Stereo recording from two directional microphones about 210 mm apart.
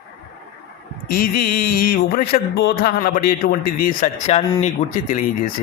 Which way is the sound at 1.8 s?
45° left (ahead or behind).